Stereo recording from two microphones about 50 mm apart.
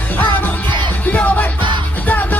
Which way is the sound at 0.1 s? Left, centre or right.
Left.